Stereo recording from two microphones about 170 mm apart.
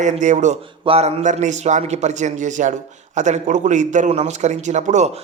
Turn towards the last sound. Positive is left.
turn(degrees=-45)  # may be behind; listen again after turning